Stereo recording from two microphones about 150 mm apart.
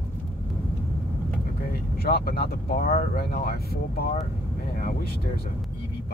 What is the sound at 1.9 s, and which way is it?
Speech, 90° left.